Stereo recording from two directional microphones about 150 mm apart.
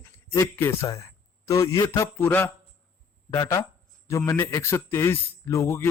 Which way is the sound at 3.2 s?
20° left (ahead or behind).